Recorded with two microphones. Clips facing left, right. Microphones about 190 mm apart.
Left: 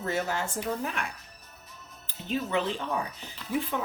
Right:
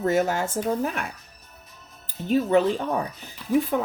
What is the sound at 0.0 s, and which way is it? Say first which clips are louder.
Speech: right 8 dB; 45° right (ahead or behind).